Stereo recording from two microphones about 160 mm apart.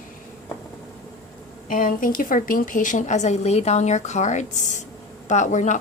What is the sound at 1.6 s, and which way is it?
A woman's voice, 55° left (ahead or behind).